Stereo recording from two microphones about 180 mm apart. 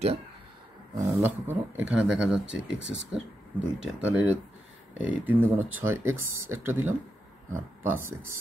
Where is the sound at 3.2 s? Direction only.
5° right (ahead or behind).